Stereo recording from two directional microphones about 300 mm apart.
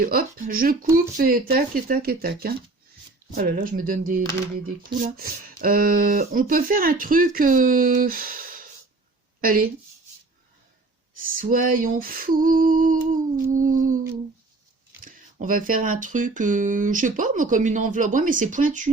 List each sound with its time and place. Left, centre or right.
0.0 s speech: right
11.1 s speech: right
15.0 s speech: right